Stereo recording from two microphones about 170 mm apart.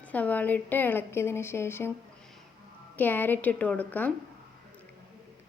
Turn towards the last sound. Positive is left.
turn(degrees=10)  # may be behind; listen again after turning